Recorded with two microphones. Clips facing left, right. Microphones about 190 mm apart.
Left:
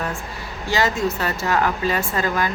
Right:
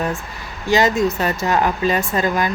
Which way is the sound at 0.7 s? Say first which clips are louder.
Right 5 dB; 20° right (ahead or behind).